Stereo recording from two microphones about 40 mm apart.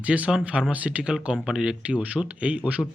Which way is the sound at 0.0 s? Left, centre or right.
Right.